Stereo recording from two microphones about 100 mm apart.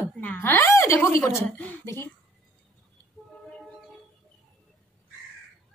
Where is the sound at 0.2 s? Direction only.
20° left (ahead or behind).